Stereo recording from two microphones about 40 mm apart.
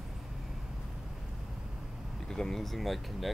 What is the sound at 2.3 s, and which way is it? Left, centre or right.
Speech, centre.